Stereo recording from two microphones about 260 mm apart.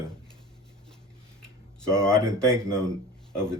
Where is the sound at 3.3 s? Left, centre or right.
Centre.